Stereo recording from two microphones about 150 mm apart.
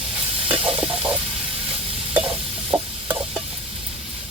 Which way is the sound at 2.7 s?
15° right (ahead or behind).